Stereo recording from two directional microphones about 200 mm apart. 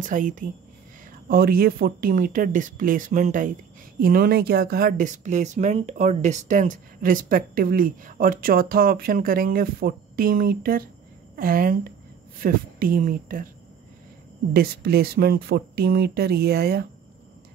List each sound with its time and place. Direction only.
0.0 s speech: 40° right (ahead or behind)
14.5 s speech: 50° right (ahead or behind)